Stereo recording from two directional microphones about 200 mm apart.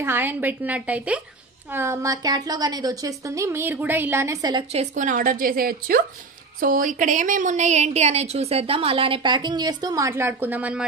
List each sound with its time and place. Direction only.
0.0 s a woman's voice: 10° right (ahead or behind)
4.9 s a woman's voice: 40° right (ahead or behind); by 10.9 s 5° right (ahead or behind)